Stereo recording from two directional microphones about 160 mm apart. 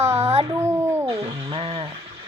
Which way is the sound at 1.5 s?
40° right (ahead or behind).